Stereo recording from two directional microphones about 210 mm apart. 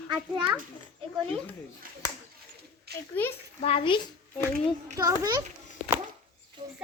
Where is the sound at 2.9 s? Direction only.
50° right (ahead or behind).